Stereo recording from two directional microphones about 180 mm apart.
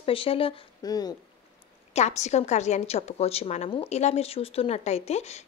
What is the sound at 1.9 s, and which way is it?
A woman's voice, 40° left (ahead or behind).